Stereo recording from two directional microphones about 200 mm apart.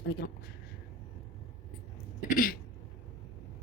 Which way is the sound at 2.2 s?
45° left (ahead or behind).